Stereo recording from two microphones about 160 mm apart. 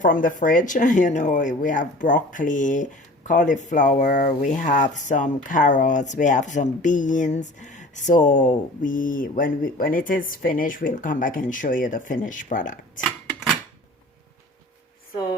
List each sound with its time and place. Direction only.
0.0 s speech: 55° left (ahead or behind)